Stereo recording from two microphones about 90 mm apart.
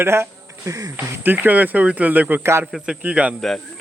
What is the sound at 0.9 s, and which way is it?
Speech, 20° right (ahead or behind).